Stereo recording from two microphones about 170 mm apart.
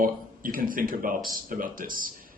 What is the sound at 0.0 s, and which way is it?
A man's voice, 55° right (ahead or behind).